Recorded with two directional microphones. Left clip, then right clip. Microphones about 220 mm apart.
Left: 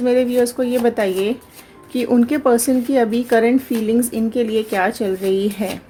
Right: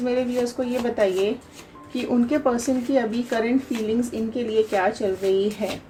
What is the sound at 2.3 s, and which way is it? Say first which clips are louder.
Speech: left 6 dB; 55° left (ahead or behind).